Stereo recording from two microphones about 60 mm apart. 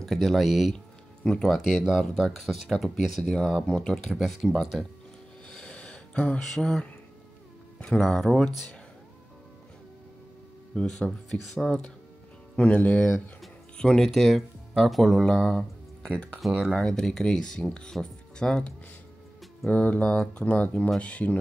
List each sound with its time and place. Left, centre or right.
0.0 s speech: centre
0.7 s a sound: centre
1.9 s speech: centre
3.6 s speech: centre
5.5 s a sound: centre
6.1 s speech: left
6.5 s speech: centre
7.9 s speech: centre
10.7 s speech: centre
12.5 s speech: left
13.0 s speech: centre
16.7 s speech: centre
19.7 s speech: left